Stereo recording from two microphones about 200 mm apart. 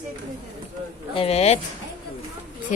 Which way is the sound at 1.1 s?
30° left (ahead or behind).